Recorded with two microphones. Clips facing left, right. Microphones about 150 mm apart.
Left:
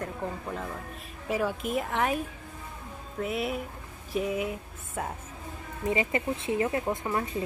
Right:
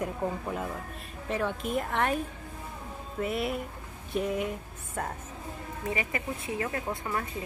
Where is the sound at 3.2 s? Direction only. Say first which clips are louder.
Even; centre (ahead or behind).